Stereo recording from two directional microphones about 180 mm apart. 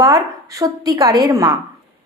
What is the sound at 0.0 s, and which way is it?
A woman's voice, 20° right (ahead or behind).